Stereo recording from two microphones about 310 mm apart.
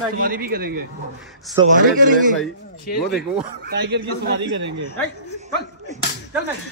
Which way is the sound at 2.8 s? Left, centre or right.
Left.